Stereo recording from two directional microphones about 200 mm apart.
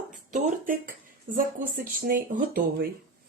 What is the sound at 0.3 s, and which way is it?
Speech, 40° right (ahead or behind).